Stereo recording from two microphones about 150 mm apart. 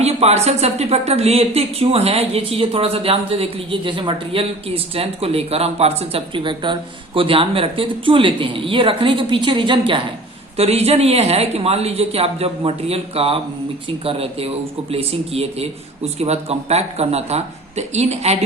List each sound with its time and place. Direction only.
0.0 s speech: 45° right (ahead or behind)
10.6 s speech: 45° right (ahead or behind)